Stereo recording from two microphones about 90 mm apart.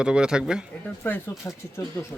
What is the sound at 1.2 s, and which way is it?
Speech, 30° left (ahead or behind).